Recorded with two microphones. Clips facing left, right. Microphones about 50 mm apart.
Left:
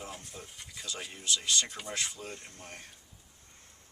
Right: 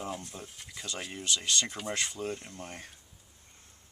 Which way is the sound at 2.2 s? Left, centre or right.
Right.